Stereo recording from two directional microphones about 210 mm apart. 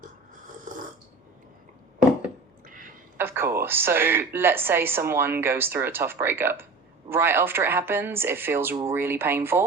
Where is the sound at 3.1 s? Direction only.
10° right (ahead or behind).